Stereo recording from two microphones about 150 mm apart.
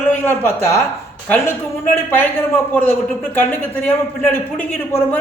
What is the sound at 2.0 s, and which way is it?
Speech, 15° left (ahead or behind).